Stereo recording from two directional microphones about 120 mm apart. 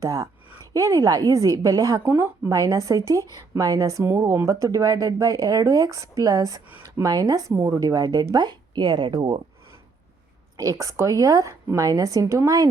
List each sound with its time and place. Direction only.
0.0 s speech: 30° right (ahead or behind)
2.0 s speech: 20° right (ahead or behind); by 9.4 s 35° right (ahead or behind)
10.6 s speech: 30° right (ahead or behind)